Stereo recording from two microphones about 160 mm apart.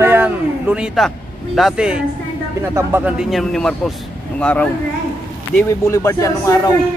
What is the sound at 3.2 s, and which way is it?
A man's voice, centre (ahead or behind).